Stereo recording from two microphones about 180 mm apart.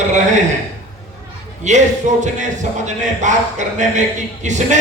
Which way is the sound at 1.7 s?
40° right (ahead or behind).